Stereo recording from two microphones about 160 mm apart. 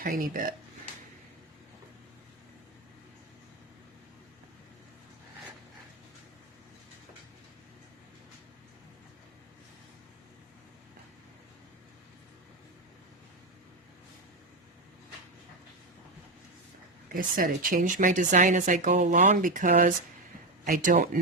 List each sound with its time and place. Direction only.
0.0 s speech: 60° right (ahead or behind)
17.2 s speech: 60° right (ahead or behind)